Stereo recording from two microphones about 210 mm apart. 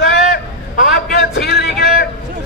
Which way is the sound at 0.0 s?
50° left (ahead or behind).